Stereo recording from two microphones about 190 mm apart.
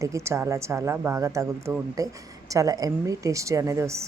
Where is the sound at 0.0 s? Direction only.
15° right (ahead or behind).